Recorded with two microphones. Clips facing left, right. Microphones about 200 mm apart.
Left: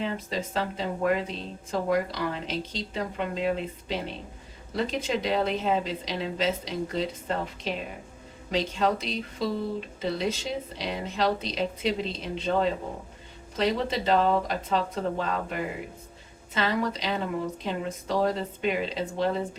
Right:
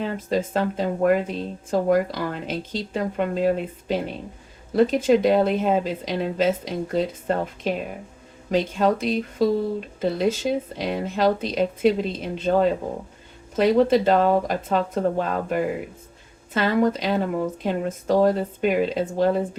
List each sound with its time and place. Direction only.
0.0 s speech: 50° right (ahead or behind)